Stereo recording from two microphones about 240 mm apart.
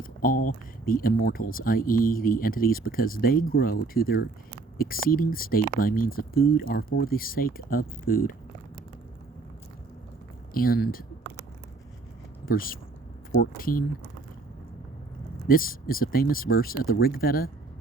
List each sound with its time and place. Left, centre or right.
0.0 s speech: left
10.5 s speech: left
12.5 s speech: left
15.4 s speech: left